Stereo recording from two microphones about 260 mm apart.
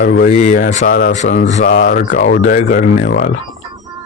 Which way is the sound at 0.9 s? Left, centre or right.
Left.